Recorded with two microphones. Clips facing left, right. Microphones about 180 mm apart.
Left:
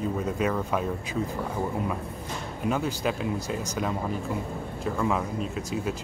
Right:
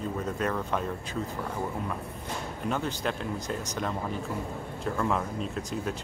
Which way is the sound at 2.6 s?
5° left (ahead or behind).